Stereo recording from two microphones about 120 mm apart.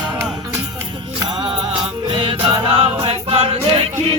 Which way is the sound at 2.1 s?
45° right (ahead or behind).